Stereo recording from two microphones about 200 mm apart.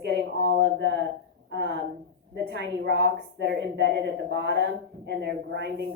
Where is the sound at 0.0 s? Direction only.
60° right (ahead or behind).